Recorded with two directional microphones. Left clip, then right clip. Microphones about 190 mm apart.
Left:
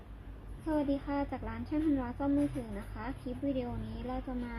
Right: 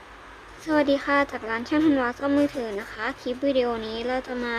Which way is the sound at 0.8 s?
25° right (ahead or behind).